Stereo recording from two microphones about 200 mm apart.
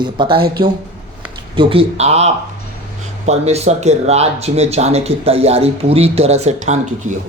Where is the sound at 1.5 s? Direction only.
30° right (ahead or behind).